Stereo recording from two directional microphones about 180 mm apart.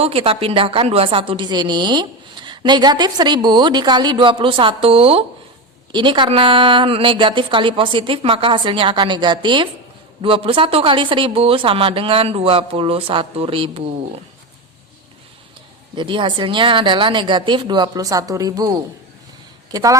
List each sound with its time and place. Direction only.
0.0 s a woman's voice: 30° right (ahead or behind)
16.0 s a woman's voice: 25° right (ahead or behind)